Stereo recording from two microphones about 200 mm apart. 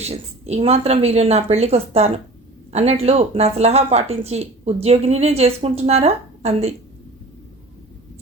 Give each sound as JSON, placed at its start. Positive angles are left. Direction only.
{"t": 0.0, "sound": "speech", "side_deg": -30}